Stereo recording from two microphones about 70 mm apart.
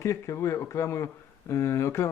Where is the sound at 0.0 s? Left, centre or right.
Left.